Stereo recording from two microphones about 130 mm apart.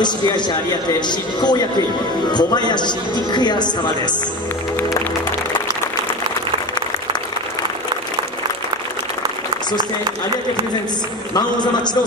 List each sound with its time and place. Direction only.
0.0 s a man's voice: 35° left (ahead or behind)
11.3 s a man's voice: 35° left (ahead or behind)